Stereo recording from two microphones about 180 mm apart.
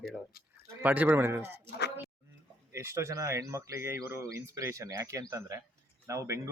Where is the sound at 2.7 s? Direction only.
15° right (ahead or behind).